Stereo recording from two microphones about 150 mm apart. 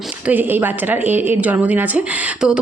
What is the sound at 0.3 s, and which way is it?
Speech, 10° right (ahead or behind).